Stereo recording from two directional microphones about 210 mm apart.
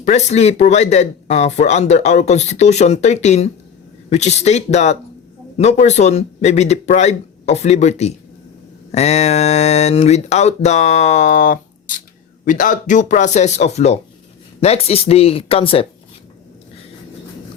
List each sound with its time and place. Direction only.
0.0 s speech: 35° left (ahead or behind)